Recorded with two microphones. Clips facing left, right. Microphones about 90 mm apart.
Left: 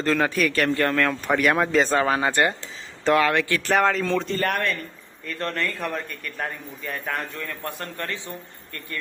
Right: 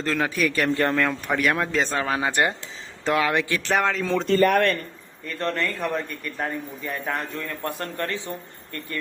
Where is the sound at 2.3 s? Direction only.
20° right (ahead or behind).